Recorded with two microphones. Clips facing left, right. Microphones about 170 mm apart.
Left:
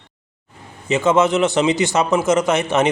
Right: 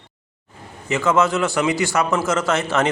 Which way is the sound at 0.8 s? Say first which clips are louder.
Left 3 dB; 20° left (ahead or behind).